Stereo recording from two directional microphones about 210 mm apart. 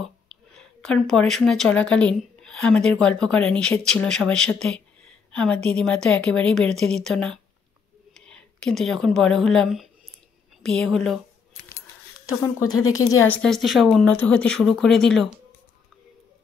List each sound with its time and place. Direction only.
0.0 s a sound: centre (ahead or behind)
1.0 s a woman's voice: centre (ahead or behind)
12.3 s speech: 15° left (ahead or behind)
13.3 s a woman's voice: centre (ahead or behind)